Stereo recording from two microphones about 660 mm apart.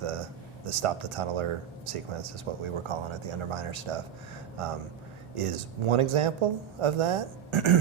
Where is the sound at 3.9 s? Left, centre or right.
Right.